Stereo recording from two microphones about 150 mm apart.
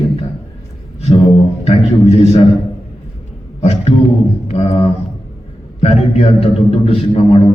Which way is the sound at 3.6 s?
45° left (ahead or behind).